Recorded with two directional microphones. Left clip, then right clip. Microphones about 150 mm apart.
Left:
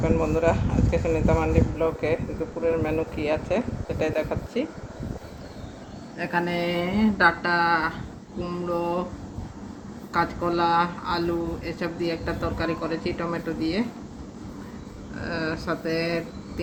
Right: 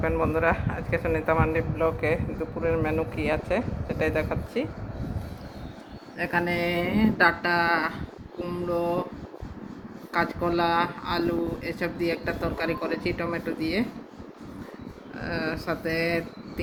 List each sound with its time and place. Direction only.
0.0 s speech: centre (ahead or behind)
6.1 s speech: 25° right (ahead or behind)
10.1 s speech: 20° right (ahead or behind)
15.2 s speech: 25° right (ahead or behind)